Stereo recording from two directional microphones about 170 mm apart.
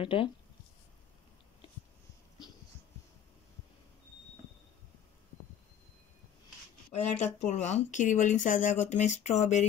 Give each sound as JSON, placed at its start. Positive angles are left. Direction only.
{"t": 0.0, "sound": "speech", "side_deg": 30}
{"t": 6.9, "sound": "speech", "side_deg": 40}